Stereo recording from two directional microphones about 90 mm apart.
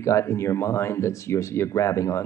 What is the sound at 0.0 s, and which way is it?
Speech, 35° left (ahead or behind).